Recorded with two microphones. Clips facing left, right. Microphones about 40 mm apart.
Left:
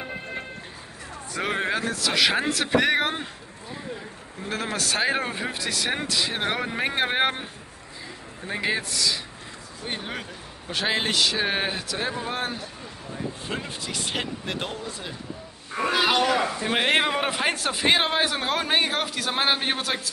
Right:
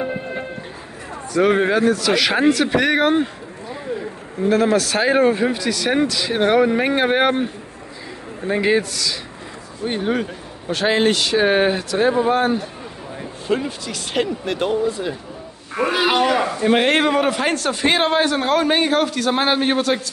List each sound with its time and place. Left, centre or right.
0.0 s music: centre
1.4 s a man's voice: centre
6.3 s a man's voice: centre
8.9 s a man's voice: centre
9.8 s a man's voice: centre
12.4 s speech: centre
13.7 s a man's voice: centre
16.4 s a man's voice: centre